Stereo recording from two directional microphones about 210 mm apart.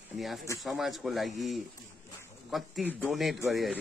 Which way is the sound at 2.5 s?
Centre (ahead or behind).